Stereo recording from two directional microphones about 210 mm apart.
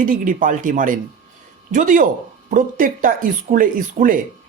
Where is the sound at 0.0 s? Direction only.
40° right (ahead or behind).